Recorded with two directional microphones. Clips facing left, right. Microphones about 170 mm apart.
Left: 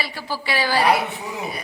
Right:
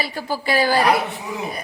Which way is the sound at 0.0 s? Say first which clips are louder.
Right 4 dB; 45° right (ahead or behind).